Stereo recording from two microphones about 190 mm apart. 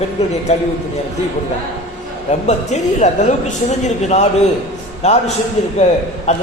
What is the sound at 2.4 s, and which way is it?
A woman's voice, 35° left (ahead or behind).